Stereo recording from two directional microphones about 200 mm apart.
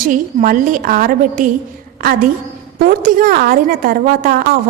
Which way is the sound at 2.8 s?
45° right (ahead or behind).